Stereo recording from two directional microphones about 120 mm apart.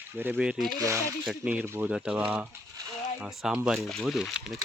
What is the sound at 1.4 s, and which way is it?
Speech, 10° right (ahead or behind).